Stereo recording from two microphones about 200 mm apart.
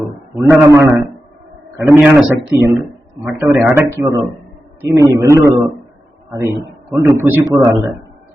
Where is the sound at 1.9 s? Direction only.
10° right (ahead or behind).